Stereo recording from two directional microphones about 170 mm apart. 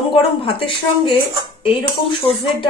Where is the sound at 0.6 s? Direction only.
30° left (ahead or behind).